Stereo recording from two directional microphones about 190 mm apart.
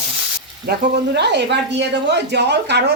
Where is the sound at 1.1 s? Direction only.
65° right (ahead or behind).